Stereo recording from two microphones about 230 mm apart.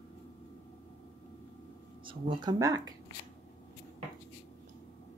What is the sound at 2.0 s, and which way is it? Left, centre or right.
Speech, right.